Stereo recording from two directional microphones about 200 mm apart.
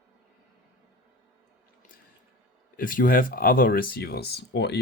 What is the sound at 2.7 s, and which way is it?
Speech, 45° left (ahead or behind).